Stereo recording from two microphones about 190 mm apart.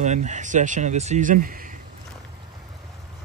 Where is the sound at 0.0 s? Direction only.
40° right (ahead or behind).